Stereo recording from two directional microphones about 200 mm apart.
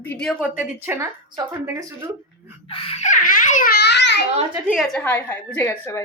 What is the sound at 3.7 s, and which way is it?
Speech, 55° left (ahead or behind).